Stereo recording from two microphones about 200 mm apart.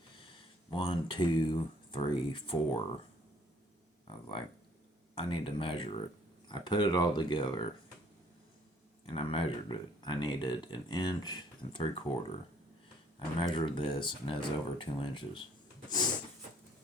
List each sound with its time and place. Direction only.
0.7 s speech: 25° left (ahead or behind)
4.0 s speech: 25° left (ahead or behind)
9.0 s speech: 25° left (ahead or behind)